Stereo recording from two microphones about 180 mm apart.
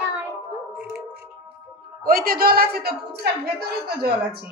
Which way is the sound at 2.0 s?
55° right (ahead or behind).